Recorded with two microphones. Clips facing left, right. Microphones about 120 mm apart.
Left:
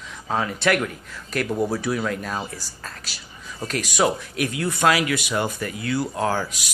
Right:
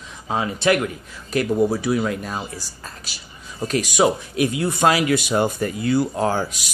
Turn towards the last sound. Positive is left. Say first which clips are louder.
# right 2 dB
turn(degrees=-25)  # may be behind; listen again after turning